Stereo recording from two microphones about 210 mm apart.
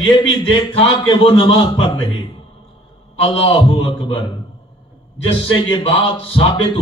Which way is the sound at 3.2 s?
25° left (ahead or behind).